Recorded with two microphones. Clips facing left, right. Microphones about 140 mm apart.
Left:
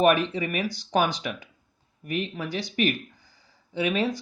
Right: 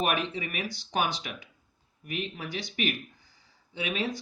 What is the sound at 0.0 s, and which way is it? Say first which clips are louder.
Speech: left 8 dB; 45° left (ahead or behind).